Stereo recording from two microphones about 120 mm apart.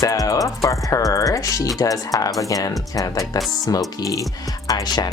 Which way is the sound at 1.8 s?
30° left (ahead or behind).